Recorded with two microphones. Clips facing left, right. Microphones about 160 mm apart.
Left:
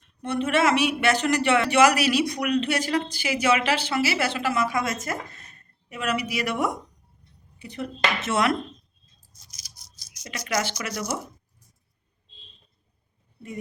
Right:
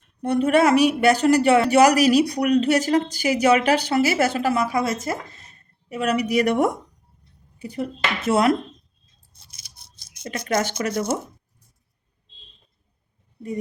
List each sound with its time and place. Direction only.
0.2 s a woman's voice: 40° right (ahead or behind)
8.3 s speech: 30° right (ahead or behind)
9.7 s rattle: 55° right (ahead or behind)
10.8 s speech: 25° right (ahead or behind)